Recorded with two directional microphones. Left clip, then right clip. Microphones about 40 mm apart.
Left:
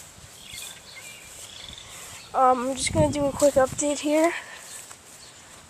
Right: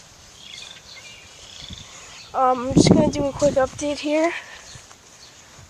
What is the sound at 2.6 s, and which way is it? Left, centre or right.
Speech, right.